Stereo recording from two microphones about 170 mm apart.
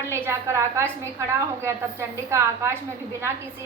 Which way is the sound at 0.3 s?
15° right (ahead or behind).